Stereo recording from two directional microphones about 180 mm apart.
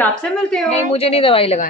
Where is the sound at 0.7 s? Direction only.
30° left (ahead or behind).